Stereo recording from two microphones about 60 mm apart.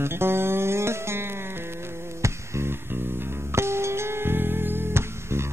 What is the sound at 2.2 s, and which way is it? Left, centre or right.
Music, right.